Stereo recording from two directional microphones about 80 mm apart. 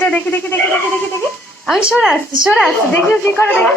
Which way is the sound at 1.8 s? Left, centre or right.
Centre.